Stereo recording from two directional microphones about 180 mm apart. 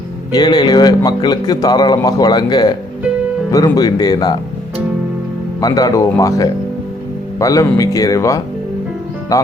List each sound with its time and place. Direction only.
0.3 s a man's voice: 20° left (ahead or behind)
5.5 s a man's voice: 20° left (ahead or behind)